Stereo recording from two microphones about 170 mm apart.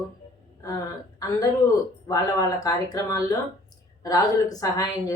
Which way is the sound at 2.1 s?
20° left (ahead or behind).